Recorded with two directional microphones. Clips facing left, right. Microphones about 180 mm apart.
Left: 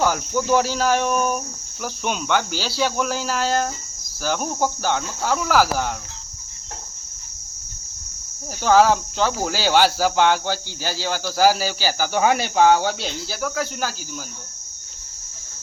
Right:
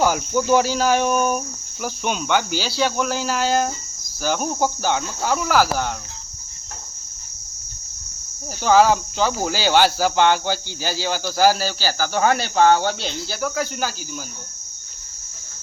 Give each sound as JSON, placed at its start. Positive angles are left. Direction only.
{"t": 0.0, "sound": "speech", "side_deg": -5}
{"t": 8.6, "sound": "speech", "side_deg": 0}